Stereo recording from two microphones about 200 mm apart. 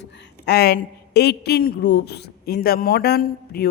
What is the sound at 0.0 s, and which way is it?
A woman's voice, 60° left (ahead or behind).